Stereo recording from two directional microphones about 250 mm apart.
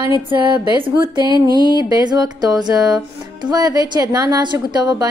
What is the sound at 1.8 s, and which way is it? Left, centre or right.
A woman's voice, centre.